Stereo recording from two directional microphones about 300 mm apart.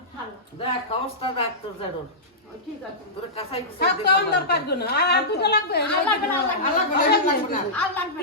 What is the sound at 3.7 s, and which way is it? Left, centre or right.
A woman's voice, left.